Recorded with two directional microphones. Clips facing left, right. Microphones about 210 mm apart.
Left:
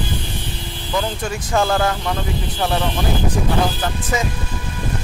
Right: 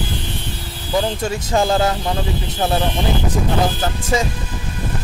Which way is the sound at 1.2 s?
25° right (ahead or behind).